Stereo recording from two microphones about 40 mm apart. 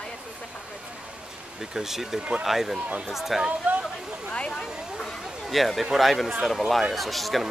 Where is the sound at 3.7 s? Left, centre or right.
Right.